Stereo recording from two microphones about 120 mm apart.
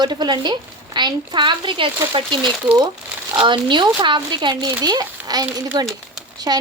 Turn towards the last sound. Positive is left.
turn(degrees=-30)  # may be behind; listen again after turning